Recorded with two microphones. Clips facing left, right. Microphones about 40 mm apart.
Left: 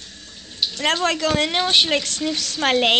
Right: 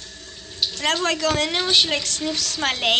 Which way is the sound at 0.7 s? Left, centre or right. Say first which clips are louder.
Left 2 dB; left.